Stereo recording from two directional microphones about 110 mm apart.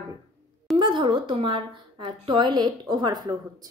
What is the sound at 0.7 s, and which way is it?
Speech, 45° right (ahead or behind).